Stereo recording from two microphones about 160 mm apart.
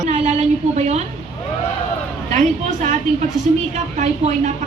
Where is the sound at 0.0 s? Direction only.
45° right (ahead or behind).